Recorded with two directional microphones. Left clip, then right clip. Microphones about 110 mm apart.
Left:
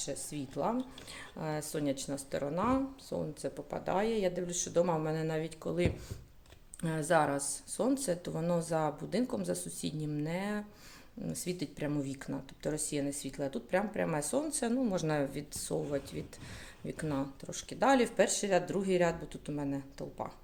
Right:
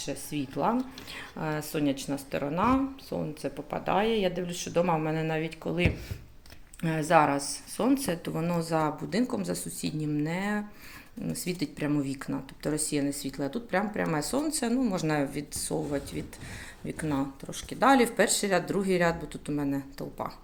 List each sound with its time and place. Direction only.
0.0 s speech: 25° left (ahead or behind)
14.4 s speech: 60° left (ahead or behind)
14.9 s speech: 50° left (ahead or behind); by 20.3 s 30° left (ahead or behind)